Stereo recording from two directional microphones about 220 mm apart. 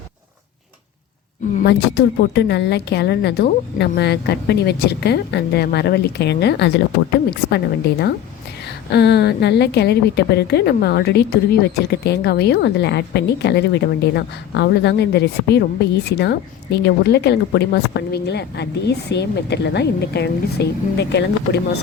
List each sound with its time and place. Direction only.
1.5 s a woman's voice: 50° left (ahead or behind)